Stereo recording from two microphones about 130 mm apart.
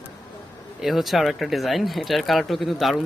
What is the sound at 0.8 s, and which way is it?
Speech, centre (ahead or behind).